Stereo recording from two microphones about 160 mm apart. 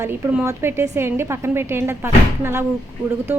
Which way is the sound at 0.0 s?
15° right (ahead or behind).